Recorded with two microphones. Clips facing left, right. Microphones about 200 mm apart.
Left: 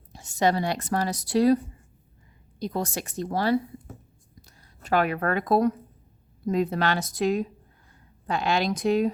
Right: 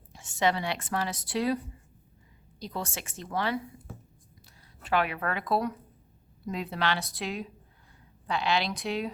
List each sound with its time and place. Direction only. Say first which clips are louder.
0.1 s a woman's voice: left 4 dB; 40° left (ahead or behind)